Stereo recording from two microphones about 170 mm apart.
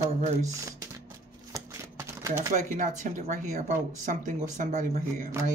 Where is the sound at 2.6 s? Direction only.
45° right (ahead or behind).